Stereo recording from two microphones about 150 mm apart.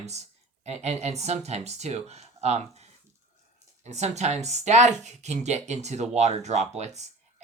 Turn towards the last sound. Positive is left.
turn(degrees=-50)  # may be behind; listen again after turning